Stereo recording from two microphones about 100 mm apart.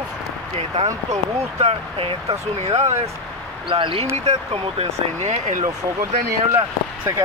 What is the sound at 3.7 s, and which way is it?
Speech, 60° right (ahead or behind).